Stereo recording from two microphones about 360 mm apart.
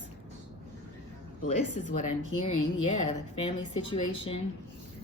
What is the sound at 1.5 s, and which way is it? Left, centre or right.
A woman's voice, left.